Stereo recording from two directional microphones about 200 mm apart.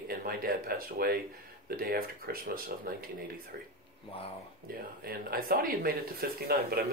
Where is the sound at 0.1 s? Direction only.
45° right (ahead or behind).